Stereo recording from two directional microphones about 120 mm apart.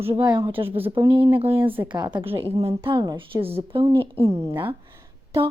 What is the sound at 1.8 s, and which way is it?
Speech, 35° right (ahead or behind).